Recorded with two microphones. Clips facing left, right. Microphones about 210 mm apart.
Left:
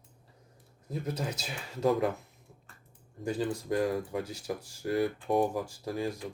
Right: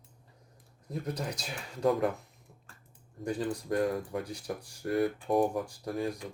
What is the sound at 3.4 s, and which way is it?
Speech, centre (ahead or behind).